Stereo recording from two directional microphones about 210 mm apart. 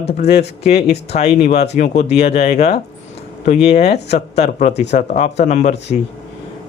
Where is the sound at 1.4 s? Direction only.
35° left (ahead or behind).